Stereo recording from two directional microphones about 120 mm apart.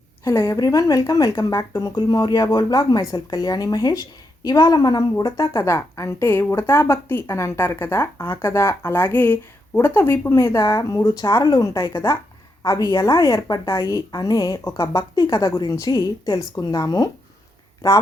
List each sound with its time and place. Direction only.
0.3 s a woman's voice: 25° left (ahead or behind)